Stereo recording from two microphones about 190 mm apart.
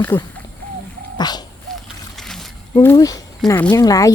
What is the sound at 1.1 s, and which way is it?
Dog, 20° left (ahead or behind).